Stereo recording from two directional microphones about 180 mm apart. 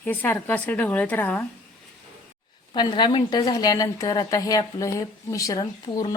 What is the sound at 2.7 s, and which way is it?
A woman's voice, 25° left (ahead or behind).